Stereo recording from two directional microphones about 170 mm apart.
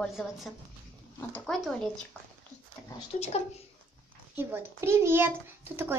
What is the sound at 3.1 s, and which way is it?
Speech, 40° left (ahead or behind).